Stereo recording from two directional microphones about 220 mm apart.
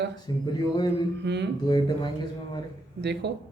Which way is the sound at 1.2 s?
50° right (ahead or behind).